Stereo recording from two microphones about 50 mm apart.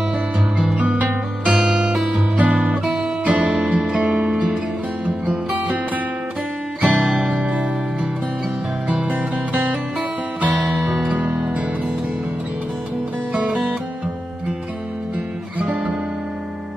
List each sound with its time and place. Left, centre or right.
0.7 s music: right
1.6 s music: centre
2.3 s guitar: right
2.8 s guitar: centre
3.3 s music: right
6.8 s music: right
13.3 s music: right
15.6 s music: right